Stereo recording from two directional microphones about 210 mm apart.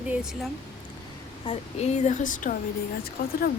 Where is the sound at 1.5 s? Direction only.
30° left (ahead or behind).